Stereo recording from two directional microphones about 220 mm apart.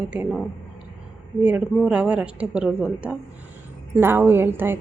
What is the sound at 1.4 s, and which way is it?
A woman's voice, 5° right (ahead or behind).